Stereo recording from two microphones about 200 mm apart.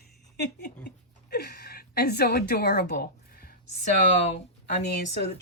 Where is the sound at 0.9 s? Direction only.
55° left (ahead or behind).